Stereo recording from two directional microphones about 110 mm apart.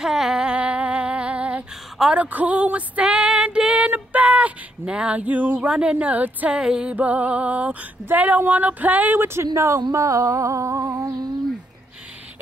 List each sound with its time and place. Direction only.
0.0 s female singing: 5° right (ahead or behind)
8.1 s speech: 15° right (ahead or behind)
9.5 s humming: 30° right (ahead or behind)